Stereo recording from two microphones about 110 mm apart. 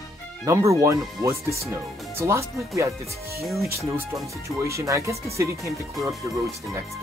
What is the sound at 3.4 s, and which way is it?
Speech, centre (ahead or behind).